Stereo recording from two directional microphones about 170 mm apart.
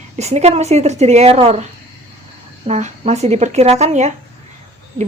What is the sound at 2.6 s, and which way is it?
A woman's voice, 40° right (ahead or behind).